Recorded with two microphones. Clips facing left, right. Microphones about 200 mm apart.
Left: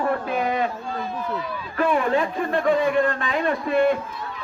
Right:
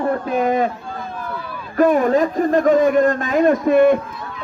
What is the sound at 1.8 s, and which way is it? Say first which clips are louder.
A man's voice: right 7 dB; 40° right (ahead or behind).